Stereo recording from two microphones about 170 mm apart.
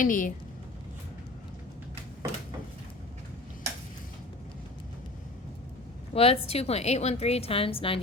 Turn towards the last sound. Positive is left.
turn(degrees=35)  # may be behind; listen again after turning